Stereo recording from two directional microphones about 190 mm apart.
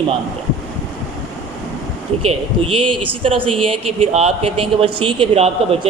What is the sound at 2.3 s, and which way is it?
A man's voice, 30° right (ahead or behind).